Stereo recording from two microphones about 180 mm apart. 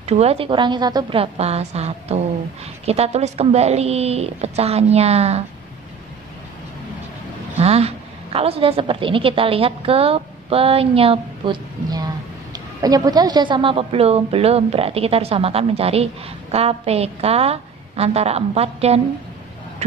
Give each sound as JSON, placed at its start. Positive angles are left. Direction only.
{"t": 0.0, "sound": "a woman's voice", "side_deg": -35}
{"t": 7.5, "sound": "a woman's voice", "side_deg": -35}